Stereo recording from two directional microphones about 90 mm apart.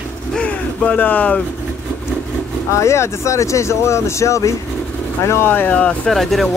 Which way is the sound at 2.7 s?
35° left (ahead or behind).